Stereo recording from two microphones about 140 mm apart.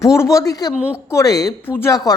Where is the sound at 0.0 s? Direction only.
20° left (ahead or behind).